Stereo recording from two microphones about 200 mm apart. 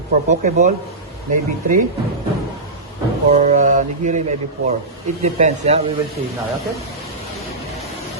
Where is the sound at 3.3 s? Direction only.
40° right (ahead or behind).